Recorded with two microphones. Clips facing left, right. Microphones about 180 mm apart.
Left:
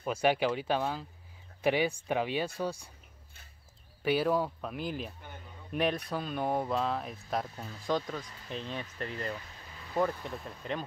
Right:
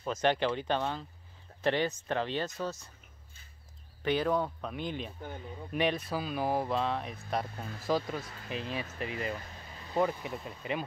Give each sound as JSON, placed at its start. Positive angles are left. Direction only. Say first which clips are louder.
{"t": 0.0, "sound": "speech", "louder": "left 1 dB", "side_deg": 10}
{"t": 4.0, "sound": "speech", "louder": "left 1 dB", "side_deg": 5}
{"t": 9.9, "sound": "speech", "louder": "right 1 dB", "side_deg": -25}
{"t": 10.4, "sound": "speech", "louder": "right 1 dB", "side_deg": -5}